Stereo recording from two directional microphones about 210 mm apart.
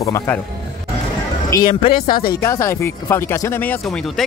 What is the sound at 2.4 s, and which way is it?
Speech, 15° left (ahead or behind).